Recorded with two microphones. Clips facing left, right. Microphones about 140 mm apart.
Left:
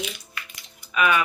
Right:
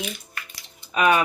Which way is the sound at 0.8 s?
35° right (ahead or behind).